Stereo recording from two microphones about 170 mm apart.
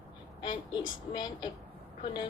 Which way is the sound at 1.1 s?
25° left (ahead or behind).